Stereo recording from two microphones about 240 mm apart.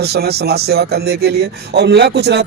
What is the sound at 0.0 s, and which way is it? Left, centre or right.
Speech, right.